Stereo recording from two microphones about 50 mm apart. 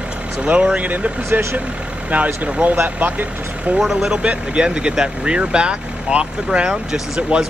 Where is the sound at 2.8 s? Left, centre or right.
Right.